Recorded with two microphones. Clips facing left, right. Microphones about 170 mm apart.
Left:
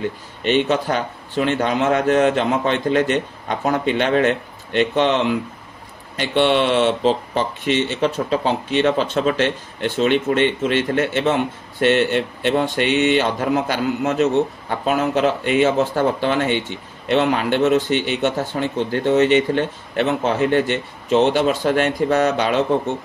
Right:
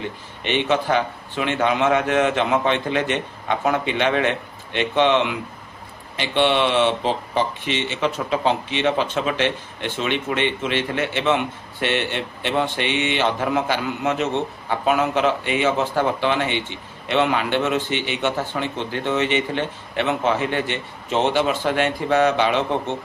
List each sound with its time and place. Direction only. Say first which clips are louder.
0.4 s speech: left 3 dB; 45° left (ahead or behind)